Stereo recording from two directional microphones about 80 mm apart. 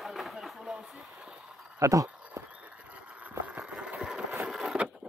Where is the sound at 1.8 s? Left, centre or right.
Right.